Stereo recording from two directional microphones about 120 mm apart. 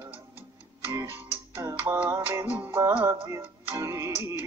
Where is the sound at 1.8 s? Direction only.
15° right (ahead or behind).